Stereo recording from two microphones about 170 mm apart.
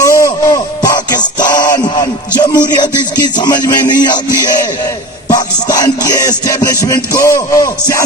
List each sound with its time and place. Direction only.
0.0 s music: 20° left (ahead or behind)